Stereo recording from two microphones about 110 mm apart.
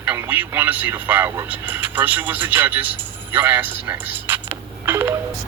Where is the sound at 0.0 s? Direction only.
15° right (ahead or behind).